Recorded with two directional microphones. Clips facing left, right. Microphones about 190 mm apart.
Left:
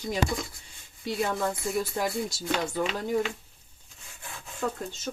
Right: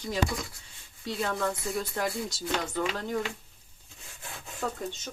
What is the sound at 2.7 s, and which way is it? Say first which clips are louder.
Speech: left 3 dB; 10° left (ahead or behind).